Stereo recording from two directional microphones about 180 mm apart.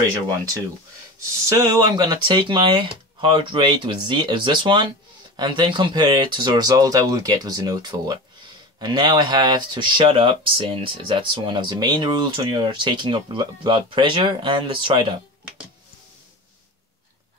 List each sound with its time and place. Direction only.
1.6 s speech: 25° right (ahead or behind)